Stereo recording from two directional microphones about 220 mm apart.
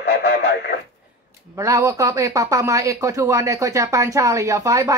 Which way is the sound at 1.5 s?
15° right (ahead or behind).